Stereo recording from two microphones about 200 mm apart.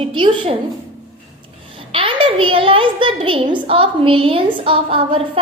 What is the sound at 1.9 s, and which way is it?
A child's voice, 25° right (ahead or behind).